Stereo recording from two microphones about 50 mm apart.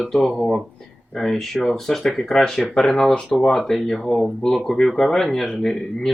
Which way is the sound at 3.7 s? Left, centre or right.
Centre.